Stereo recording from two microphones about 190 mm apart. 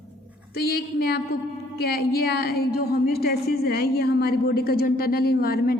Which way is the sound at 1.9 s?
55° left (ahead or behind).